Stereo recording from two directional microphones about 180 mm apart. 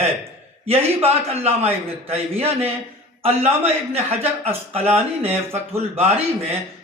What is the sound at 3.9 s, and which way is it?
Speech, 35° right (ahead or behind).